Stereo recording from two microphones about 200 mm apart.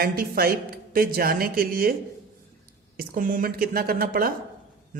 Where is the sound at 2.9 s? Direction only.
45° right (ahead or behind).